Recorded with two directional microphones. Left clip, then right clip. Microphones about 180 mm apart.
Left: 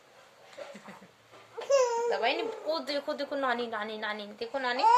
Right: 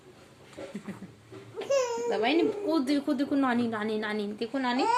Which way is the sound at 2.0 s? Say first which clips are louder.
Right 3 dB; 5° left (ahead or behind).